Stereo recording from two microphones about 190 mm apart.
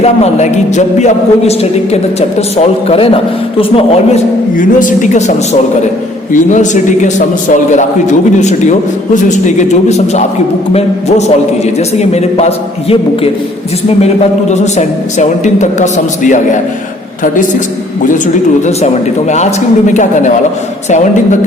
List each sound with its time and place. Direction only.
0.0 s a man's voice: 35° left (ahead or behind)
4.5 s a man's voice: 45° left (ahead or behind)
6.3 s a man's voice: 40° left (ahead or behind)
10.8 s a man's voice: 35° left (ahead or behind)
14.5 s a man's voice: 40° left (ahead or behind)
19.3 s a man's voice: 40° left (ahead or behind)